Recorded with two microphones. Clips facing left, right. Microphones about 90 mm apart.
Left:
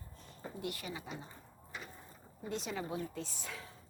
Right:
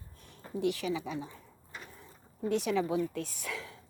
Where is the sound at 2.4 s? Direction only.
70° right (ahead or behind).